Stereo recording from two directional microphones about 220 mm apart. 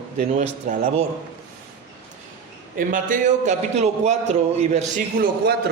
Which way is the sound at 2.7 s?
35° right (ahead or behind).